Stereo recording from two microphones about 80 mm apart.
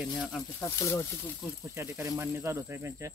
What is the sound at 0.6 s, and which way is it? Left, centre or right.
Speech, left.